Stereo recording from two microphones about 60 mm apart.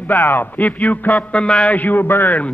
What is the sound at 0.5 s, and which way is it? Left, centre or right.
A man's voice, left.